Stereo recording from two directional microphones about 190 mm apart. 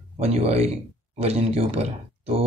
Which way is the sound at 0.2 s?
35° right (ahead or behind).